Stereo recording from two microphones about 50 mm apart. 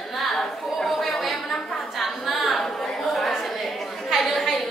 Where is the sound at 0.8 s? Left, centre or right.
Centre.